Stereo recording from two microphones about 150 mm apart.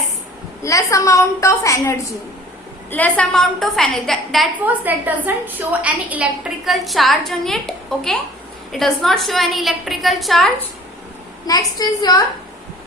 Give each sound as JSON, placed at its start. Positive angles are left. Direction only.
{"t": 0.6, "sound": "a woman's voice", "side_deg": 20}
{"t": 2.9, "sound": "a woman's voice", "side_deg": 10}
{"t": 4.6, "sound": "a woman's voice", "side_deg": -10}
{"t": 11.4, "sound": "a woman's voice", "side_deg": 25}